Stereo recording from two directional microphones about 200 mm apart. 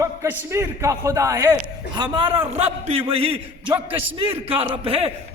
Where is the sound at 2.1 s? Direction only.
25° right (ahead or behind).